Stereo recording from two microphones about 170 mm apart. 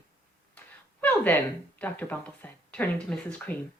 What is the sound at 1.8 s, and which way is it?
Speech, 10° left (ahead or behind).